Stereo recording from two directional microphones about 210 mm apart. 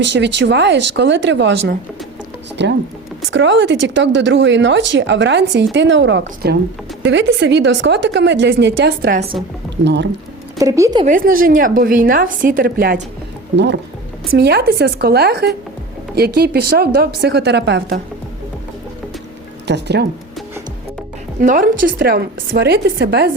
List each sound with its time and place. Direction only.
0.0 s speech: 55° right (ahead or behind)
9.8 s speech: 55° right (ahead or behind)
10.6 s speech: 15° right (ahead or behind)
11.0 s a woman's voice: 40° right (ahead or behind)
14.3 s a woman's voice: 50° right (ahead or behind)
19.6 s speech: 55° right (ahead or behind)
21.4 s a woman's voice: 40° right (ahead or behind)